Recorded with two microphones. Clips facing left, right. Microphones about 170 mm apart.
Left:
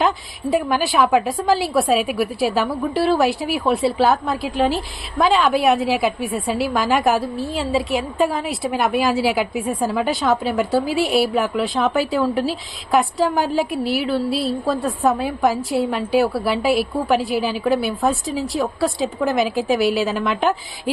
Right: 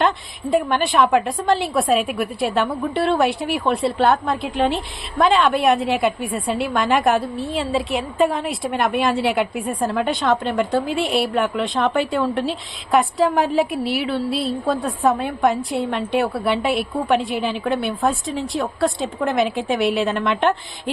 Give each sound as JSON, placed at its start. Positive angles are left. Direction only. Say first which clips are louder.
{"t": 0.5, "sound": "a woman's voice", "louder": "right 1 dB", "side_deg": 0}